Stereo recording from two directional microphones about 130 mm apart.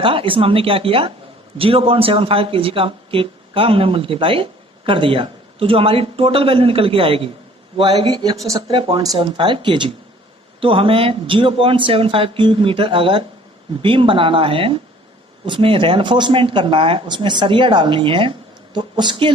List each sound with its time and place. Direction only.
0.0 s speech: 45° right (ahead or behind)